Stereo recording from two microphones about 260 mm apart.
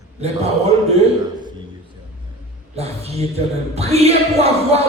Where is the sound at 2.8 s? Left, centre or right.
Right.